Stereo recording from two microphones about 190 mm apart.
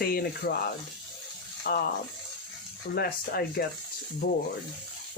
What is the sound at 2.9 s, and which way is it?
Speech, 55° left (ahead or behind).